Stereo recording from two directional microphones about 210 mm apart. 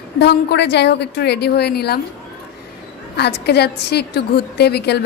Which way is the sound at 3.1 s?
50° left (ahead or behind).